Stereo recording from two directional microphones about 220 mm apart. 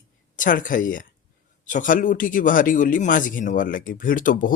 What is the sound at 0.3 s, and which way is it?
Speech, 35° left (ahead or behind).